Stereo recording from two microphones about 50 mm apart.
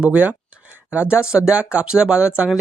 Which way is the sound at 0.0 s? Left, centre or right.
Right.